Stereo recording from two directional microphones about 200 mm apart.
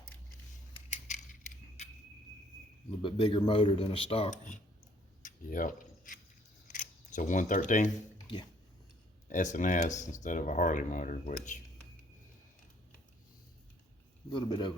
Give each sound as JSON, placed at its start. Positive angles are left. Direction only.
{"t": 0.9, "sound": "keys jangling", "side_deg": 35}
{"t": 3.0, "sound": "speech", "side_deg": 25}
{"t": 5.2, "sound": "a sound", "side_deg": 40}
{"t": 6.7, "sound": "camera", "side_deg": 40}
{"t": 9.3, "sound": "speech", "side_deg": 40}
{"t": 14.3, "sound": "speech", "side_deg": 25}